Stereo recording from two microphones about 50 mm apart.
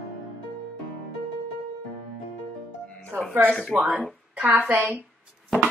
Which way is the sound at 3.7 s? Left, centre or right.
Right.